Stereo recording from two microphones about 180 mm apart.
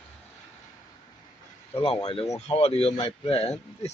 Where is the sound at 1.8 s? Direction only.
30° left (ahead or behind).